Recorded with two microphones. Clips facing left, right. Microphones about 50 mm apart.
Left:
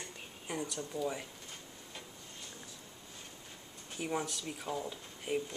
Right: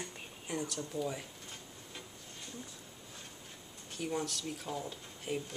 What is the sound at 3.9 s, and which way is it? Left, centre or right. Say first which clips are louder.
Speech: even; centre.